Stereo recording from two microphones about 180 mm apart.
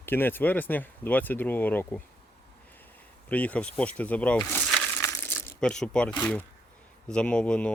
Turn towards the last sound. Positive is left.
turn(degrees=5)  # may be behind; listen again after turning